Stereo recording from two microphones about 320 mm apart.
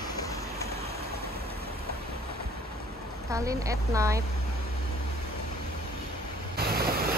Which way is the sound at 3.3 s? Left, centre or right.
Centre.